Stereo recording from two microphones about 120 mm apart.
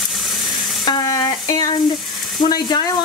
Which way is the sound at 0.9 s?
35° left (ahead or behind).